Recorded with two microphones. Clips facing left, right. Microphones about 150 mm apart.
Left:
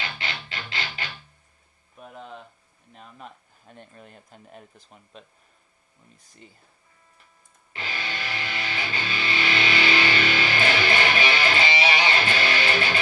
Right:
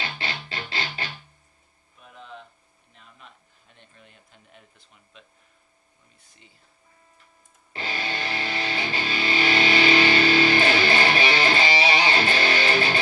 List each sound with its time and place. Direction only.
0.0 s music: 35° right (ahead or behind)
2.0 s a sound: 45° left (ahead or behind)
2.9 s speech: 45° left (ahead or behind)
7.7 s music: 35° right (ahead or behind)